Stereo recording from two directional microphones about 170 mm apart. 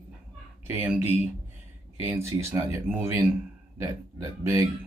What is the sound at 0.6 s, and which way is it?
Speech, 10° right (ahead or behind).